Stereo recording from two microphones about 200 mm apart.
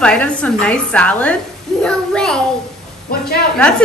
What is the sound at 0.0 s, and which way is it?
A woman's voice, 5° left (ahead or behind).